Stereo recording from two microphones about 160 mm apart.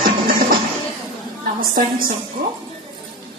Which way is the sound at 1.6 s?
60° right (ahead or behind).